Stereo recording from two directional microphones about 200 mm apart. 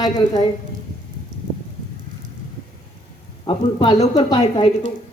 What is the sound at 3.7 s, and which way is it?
Speech, 25° left (ahead or behind).